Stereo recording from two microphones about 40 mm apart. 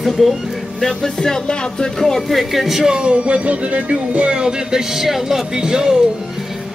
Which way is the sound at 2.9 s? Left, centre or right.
Right.